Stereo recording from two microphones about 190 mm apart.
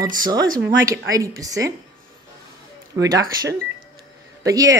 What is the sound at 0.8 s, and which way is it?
Speech, 15° right (ahead or behind).